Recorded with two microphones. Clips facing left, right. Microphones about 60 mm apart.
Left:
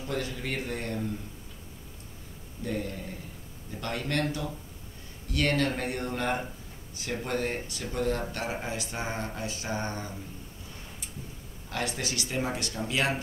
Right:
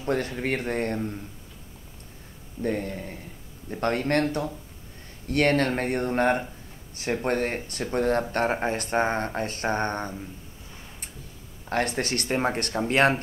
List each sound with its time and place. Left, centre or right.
0.0 s speech: right
2.6 s speech: right
11.7 s speech: right